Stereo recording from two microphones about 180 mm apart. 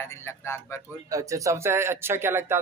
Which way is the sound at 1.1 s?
20° right (ahead or behind).